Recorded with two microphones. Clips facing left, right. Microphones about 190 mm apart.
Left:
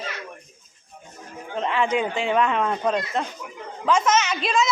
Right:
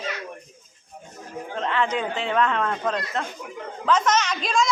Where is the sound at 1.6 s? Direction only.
10° left (ahead or behind).